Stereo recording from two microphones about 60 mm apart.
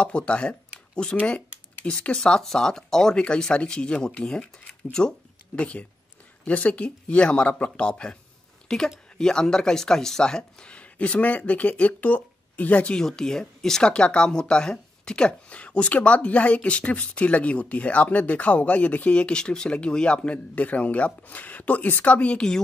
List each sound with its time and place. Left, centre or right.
0.0 s speech: centre
13.0 s speech: centre